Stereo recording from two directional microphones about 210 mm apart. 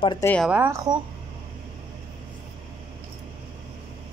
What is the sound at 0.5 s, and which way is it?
Speech, 10° right (ahead or behind).